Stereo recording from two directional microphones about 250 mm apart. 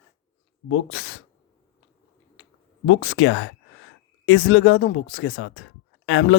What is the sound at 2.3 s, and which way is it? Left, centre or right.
Speech, left.